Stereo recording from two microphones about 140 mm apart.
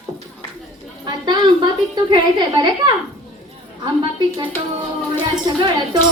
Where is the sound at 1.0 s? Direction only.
30° right (ahead or behind).